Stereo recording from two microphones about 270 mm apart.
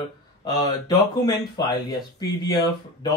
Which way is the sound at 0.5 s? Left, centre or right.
Centre.